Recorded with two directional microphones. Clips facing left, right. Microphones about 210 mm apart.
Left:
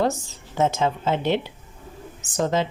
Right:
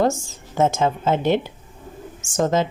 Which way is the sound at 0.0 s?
45° right (ahead or behind).